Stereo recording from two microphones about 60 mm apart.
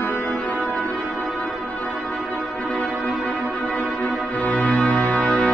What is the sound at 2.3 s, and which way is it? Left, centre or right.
Music, left.